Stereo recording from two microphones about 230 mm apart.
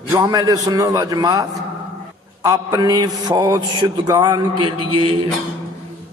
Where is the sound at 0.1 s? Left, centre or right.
Centre.